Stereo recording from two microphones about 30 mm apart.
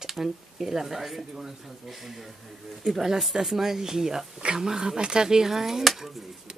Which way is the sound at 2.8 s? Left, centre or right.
Centre.